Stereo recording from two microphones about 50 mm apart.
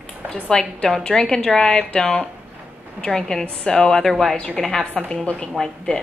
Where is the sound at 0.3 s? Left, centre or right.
Centre.